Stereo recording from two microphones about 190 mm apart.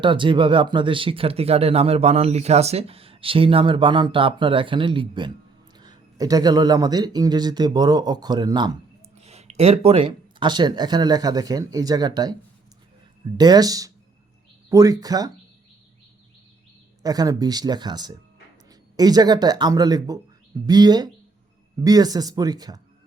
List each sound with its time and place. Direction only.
0.0 s speech: 25° right (ahead or behind)
9.1 s speech: 35° right (ahead or behind); by 15.3 s 20° right (ahead or behind)
17.0 s speech: 20° right (ahead or behind)